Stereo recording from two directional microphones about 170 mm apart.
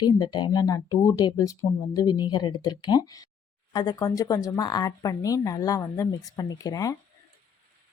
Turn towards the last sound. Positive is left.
turn(degrees=20)  # may be behind; listen again after turning